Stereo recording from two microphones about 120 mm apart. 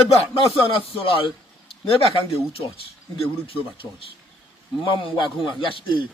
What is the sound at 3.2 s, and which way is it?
A man's voice, 50° left (ahead or behind).